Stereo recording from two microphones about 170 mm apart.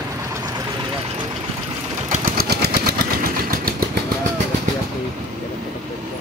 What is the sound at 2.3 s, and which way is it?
Vehicle, 65° right (ahead or behind).